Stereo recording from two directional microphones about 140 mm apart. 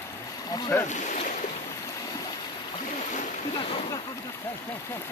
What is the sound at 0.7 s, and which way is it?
Speech, 15° left (ahead or behind).